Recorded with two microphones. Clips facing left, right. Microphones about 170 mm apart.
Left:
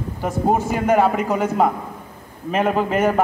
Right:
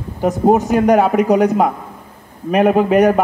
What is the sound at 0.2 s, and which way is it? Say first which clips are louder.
A man's voice: right 6 dB; 20° right (ahead or behind).